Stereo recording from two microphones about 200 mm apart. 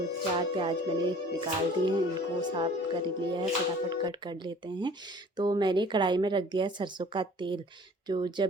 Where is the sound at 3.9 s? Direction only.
20° right (ahead or behind).